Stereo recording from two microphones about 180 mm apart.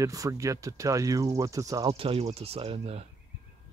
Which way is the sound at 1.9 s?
30° right (ahead or behind).